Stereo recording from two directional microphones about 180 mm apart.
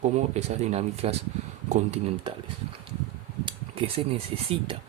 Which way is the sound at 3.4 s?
30° right (ahead or behind).